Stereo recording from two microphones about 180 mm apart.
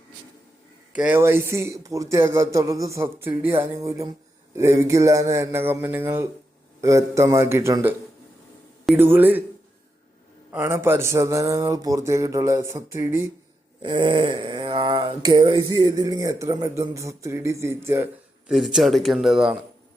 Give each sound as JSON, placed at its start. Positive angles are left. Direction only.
{"t": 0.9, "sound": "speech", "side_deg": -10}
{"t": 3.6, "sound": "a sound", "side_deg": -20}
{"t": 4.5, "sound": "speech", "side_deg": -15}
{"t": 9.0, "sound": "speech", "side_deg": -10}
{"t": 10.5, "sound": "speech", "side_deg": -15}
{"t": 13.8, "sound": "a sound", "side_deg": -25}
{"t": 18.5, "sound": "speech", "side_deg": 0}